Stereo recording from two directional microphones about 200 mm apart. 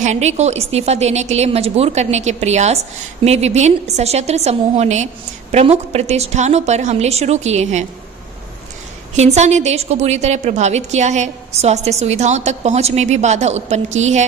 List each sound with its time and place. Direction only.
0.0 s a woman's voice: 35° right (ahead or behind)
9.1 s a woman's voice: 35° right (ahead or behind)